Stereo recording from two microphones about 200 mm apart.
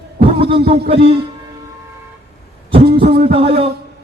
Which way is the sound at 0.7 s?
30° right (ahead or behind).